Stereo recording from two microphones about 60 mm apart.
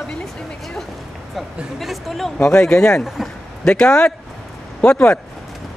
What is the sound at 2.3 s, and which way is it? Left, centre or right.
Speech, centre.